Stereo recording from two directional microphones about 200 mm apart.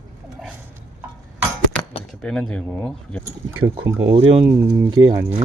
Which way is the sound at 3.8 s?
10° right (ahead or behind).